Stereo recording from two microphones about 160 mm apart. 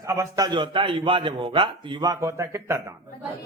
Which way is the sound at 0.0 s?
20° right (ahead or behind).